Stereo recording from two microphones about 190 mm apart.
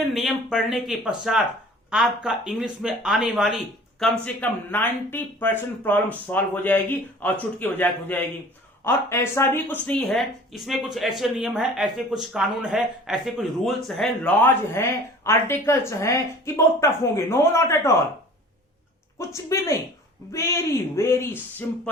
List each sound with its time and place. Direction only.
0.1 s speech: centre (ahead or behind)
4.4 s speech: 10° left (ahead or behind)
19.2 s speech: 15° left (ahead or behind)